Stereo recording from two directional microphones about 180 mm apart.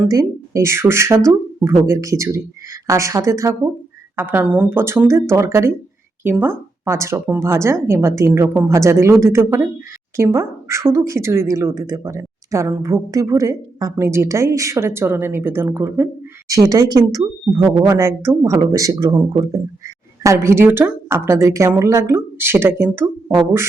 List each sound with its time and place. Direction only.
0.0 s a woman's voice: 15° right (ahead or behind)